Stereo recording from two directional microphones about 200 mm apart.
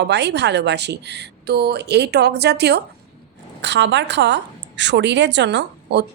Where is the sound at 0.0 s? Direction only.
60° right (ahead or behind).